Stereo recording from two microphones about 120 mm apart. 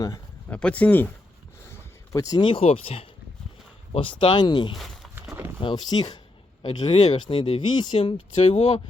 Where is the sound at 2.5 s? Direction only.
55° left (ahead or behind).